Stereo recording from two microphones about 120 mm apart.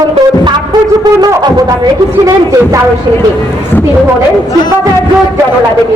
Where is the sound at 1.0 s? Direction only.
35° right (ahead or behind).